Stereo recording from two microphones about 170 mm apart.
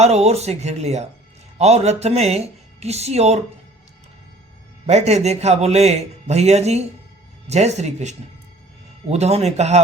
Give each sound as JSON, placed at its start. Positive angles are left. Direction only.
{"t": 0.0, "sound": "speech", "side_deg": -40}
{"t": 4.9, "sound": "speech", "side_deg": -40}